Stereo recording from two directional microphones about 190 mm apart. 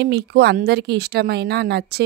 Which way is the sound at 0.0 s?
60° right (ahead or behind).